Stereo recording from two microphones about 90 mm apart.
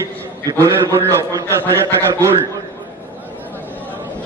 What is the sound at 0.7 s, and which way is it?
A man's voice, 30° right (ahead or behind).